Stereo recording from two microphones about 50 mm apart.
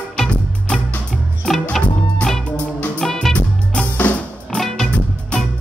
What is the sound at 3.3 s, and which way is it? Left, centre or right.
Music, left.